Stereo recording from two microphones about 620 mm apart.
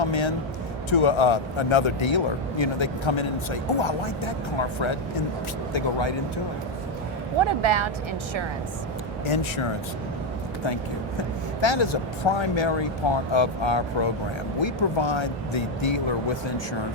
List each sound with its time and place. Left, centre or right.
0.1 s speech: left
5.7 s speech: left
7.4 s speech: right
9.2 s speech: left
11.2 s speech: left